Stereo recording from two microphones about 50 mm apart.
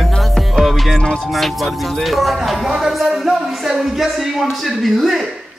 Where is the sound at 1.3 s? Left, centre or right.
Centre.